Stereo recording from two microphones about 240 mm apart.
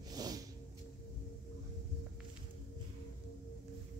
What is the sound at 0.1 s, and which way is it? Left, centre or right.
Music, centre.